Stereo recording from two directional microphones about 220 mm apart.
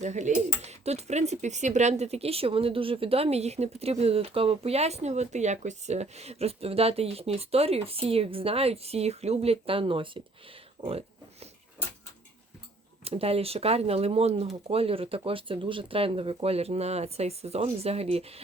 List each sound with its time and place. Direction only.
0.0 s speech: 35° right (ahead or behind)
13.1 s speech: 25° right (ahead or behind)